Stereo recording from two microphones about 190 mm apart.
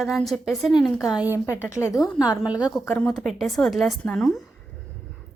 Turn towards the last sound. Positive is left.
turn(degrees=0)  # may be behind; listen again after turning